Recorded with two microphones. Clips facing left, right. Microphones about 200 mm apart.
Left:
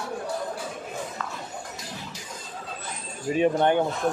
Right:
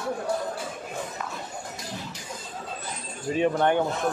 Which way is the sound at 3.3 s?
20° left (ahead or behind).